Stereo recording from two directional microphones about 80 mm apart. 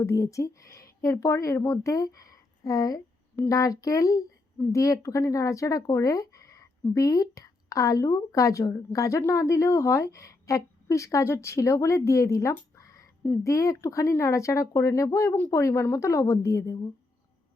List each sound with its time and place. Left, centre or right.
0.0 s a woman's voice: left